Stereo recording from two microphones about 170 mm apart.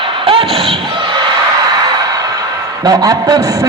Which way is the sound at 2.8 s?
20° right (ahead or behind).